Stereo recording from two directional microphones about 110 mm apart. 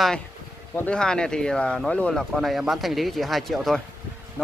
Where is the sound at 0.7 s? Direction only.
10° left (ahead or behind).